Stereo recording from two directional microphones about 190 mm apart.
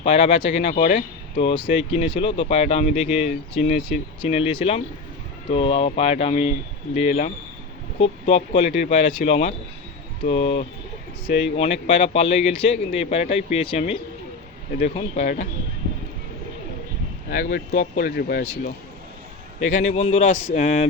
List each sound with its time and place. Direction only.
0.0 s speech: 30° left (ahead or behind)
2.9 s speech: 5° right (ahead or behind)
3.2 s speech: 40° left (ahead or behind)
17.3 s speech: 50° left (ahead or behind)
19.5 s speech: 40° left (ahead or behind)